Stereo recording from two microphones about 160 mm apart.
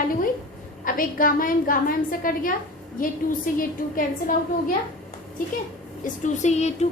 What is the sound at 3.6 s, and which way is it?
A woman's voice, 60° left (ahead or behind).